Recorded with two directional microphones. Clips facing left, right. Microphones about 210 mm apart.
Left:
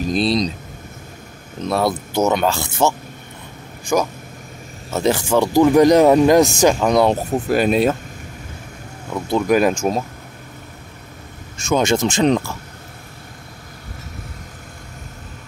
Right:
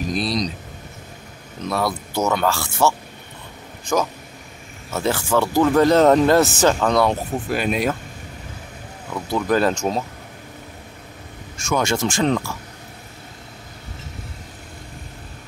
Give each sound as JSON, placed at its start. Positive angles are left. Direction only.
{"t": 0.1, "sound": "speech", "side_deg": 25}
{"t": 1.7, "sound": "speech", "side_deg": 25}
{"t": 7.1, "sound": "speech", "side_deg": 35}
{"t": 9.5, "sound": "speech", "side_deg": 10}
{"t": 11.5, "sound": "speech", "side_deg": 20}